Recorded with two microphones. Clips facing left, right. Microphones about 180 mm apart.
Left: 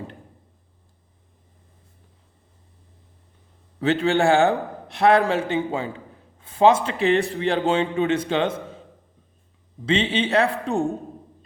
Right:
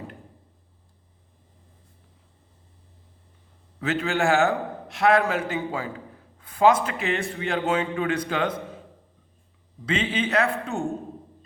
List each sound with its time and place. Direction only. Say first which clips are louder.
3.8 s a man's voice: left 5 dB; 30° left (ahead or behind)
9.8 s a man's voice: left 4 dB; 25° left (ahead or behind)